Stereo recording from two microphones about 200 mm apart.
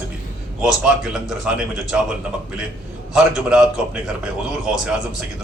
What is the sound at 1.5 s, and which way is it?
Speech, 5° right (ahead or behind).